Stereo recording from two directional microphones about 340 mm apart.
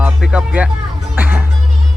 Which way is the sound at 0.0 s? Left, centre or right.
Centre.